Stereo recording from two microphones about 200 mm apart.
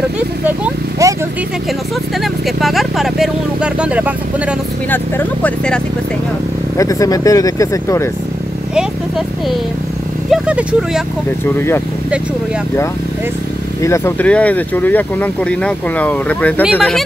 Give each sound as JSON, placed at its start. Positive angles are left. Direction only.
{"t": 0.5, "sound": "vehicle", "side_deg": -15}
{"t": 2.4, "sound": "speech", "side_deg": 0}
{"t": 4.9, "sound": "speech", "side_deg": 10}
{"t": 6.8, "sound": "speech", "side_deg": 15}
{"t": 10.3, "sound": "speech", "side_deg": -5}
{"t": 11.5, "sound": "speech", "side_deg": 10}
{"t": 13.8, "sound": "speech", "side_deg": 15}